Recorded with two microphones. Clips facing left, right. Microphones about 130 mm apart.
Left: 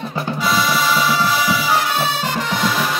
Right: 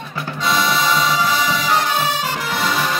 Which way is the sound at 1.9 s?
10° right (ahead or behind).